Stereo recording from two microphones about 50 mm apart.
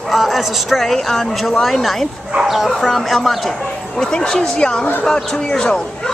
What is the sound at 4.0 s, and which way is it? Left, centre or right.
Speech, centre.